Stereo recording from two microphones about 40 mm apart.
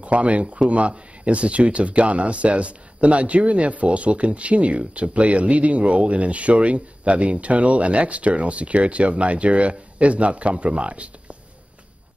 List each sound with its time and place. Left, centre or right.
0.0 s speech: right